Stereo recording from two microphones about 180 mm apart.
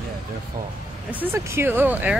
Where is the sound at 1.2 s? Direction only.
15° right (ahead or behind).